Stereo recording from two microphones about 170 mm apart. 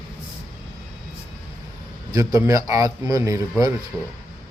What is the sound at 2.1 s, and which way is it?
Speech, 20° right (ahead or behind).